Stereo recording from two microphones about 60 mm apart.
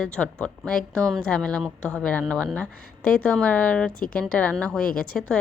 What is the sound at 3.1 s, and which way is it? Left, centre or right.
A woman's voice, centre.